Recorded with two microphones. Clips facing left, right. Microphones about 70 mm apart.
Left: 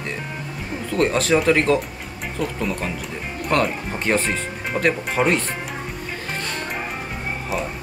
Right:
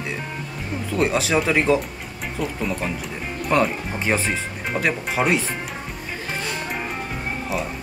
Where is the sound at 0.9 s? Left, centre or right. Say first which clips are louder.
Left 2 dB; centre.